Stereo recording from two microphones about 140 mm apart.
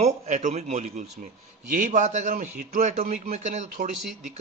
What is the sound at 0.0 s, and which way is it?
A man's voice, 55° right (ahead or behind).